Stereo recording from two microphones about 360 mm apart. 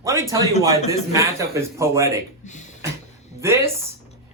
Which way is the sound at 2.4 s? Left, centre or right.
Centre.